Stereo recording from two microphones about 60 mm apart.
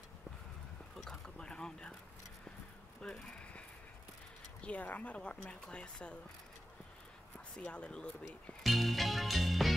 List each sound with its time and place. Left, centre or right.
0.9 s boat: centre
3.0 s a sound: centre
4.6 s a woman's voice: left
7.5 s a woman's voice: centre
8.6 s music: centre